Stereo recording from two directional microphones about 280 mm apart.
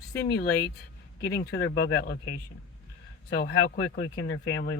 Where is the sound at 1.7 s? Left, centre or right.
Left.